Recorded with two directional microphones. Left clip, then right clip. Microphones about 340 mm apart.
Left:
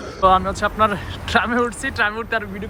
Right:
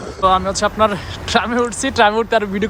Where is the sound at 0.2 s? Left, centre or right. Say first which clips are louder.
Right 1 dB; centre.